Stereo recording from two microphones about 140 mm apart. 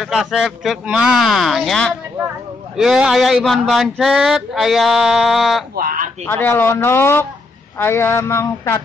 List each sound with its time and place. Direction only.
0.0 s a sound: centre (ahead or behind)
5.8 s speech: 90° right
6.2 s speech: 15° left (ahead or behind)